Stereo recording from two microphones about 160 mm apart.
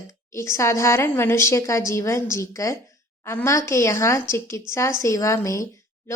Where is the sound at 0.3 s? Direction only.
15° left (ahead or behind).